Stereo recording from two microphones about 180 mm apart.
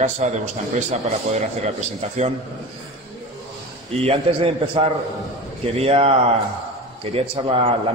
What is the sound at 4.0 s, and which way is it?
A man's voice, 30° right (ahead or behind).